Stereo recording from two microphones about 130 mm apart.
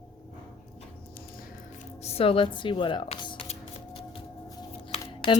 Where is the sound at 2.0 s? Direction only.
45° left (ahead or behind).